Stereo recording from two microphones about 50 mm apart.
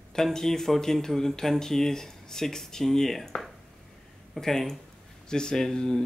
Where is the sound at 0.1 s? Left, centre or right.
Centre.